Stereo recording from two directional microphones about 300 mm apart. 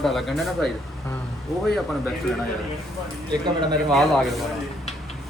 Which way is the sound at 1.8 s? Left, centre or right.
Centre.